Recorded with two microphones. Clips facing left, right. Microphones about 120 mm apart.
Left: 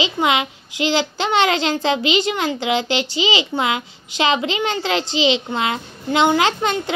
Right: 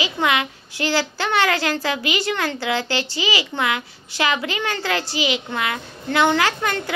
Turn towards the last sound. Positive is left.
turn(degrees=20)  # may be behind; listen again after turning